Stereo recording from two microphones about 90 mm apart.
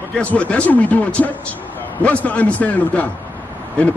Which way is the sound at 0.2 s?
15° left (ahead or behind).